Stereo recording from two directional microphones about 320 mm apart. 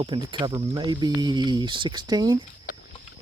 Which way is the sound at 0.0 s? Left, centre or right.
Centre.